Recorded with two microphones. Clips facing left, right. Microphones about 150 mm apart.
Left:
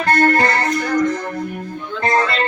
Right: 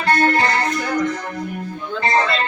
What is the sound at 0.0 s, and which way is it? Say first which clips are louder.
Music: left 2 dB; 50° left (ahead or behind).